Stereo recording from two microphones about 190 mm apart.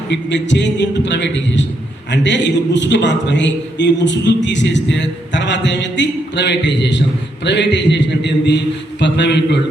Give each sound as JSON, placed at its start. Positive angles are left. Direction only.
{"t": 0.1, "sound": "a man's voice", "side_deg": 70}